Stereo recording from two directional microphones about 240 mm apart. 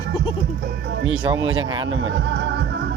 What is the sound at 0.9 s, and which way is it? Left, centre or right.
Music, right.